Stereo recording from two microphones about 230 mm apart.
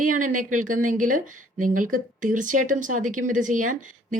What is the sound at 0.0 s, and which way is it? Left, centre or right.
A woman's voice, right.